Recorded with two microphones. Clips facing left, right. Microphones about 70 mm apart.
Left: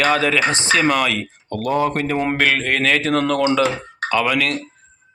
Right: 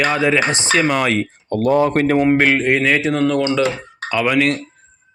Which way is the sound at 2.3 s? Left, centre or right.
Right.